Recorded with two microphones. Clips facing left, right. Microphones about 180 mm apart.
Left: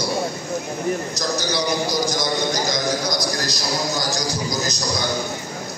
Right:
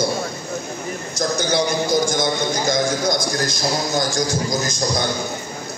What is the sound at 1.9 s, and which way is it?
A man's voice, 25° right (ahead or behind).